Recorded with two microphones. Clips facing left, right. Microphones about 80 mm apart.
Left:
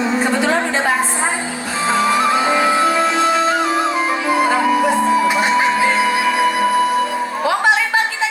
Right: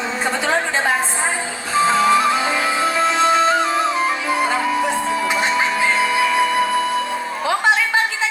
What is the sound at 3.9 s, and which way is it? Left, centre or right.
Music, left.